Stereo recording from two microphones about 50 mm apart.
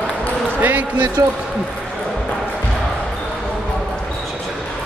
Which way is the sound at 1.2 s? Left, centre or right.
Right.